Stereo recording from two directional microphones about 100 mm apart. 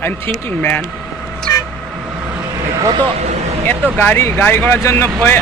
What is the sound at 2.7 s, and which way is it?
Speech, 30° right (ahead or behind).